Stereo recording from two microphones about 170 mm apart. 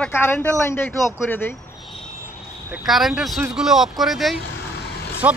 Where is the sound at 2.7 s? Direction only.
Centre (ahead or behind).